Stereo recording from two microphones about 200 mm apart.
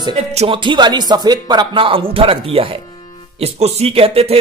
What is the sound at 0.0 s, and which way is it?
Speech, 30° right (ahead or behind).